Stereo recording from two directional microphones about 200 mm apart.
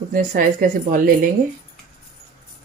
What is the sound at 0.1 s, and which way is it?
Speech, 45° right (ahead or behind).